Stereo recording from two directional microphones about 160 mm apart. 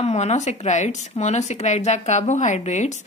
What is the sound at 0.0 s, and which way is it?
Speech, 45° left (ahead or behind).